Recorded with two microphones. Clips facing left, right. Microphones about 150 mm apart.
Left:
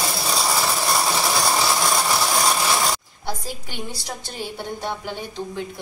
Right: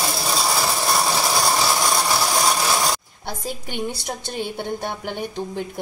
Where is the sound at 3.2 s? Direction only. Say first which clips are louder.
Even; 55° right (ahead or behind).